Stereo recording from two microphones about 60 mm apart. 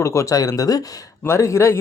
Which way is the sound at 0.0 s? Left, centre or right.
Left.